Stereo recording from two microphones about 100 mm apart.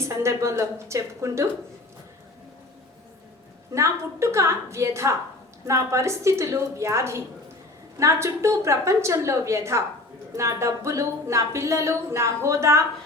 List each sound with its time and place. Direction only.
0.0 s speech: 30° right (ahead or behind)
3.7 s speech: 30° right (ahead or behind)